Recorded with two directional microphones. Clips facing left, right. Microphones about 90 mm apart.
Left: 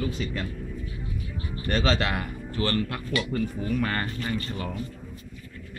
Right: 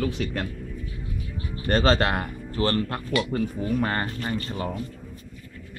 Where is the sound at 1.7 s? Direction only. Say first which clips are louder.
Right 4 dB; 45° right (ahead or behind); by 4.7 s 30° right (ahead or behind).